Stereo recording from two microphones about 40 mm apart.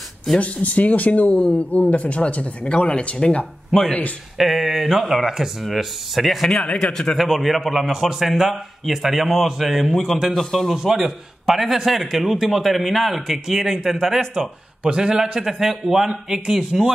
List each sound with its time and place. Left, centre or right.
0.4 s speech: left
4.4 s a man's voice: centre
6.6 s speech: left
6.9 s a man's voice: centre
7.2 s a man's voice: centre
10.8 s a man's voice: centre
14.8 s a man's voice: right